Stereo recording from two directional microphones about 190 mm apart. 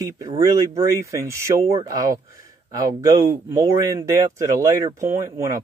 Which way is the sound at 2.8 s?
20° right (ahead or behind).